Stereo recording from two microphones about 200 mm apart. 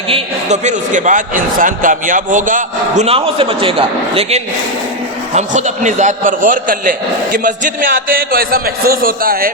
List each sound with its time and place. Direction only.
0.1 s a man's voice: 35° right (ahead or behind)